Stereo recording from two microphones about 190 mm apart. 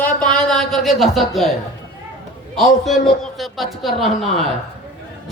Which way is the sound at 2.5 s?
Centre (ahead or behind).